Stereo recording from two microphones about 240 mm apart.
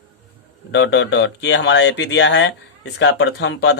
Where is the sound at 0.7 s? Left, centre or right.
Left.